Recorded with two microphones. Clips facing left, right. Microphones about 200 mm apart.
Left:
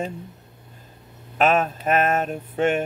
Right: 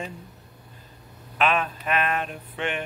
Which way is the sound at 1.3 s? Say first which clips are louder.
Left 5 dB; 45° left (ahead or behind).